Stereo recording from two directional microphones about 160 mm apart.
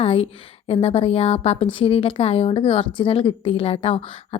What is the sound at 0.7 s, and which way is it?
A woman's voice, 35° left (ahead or behind).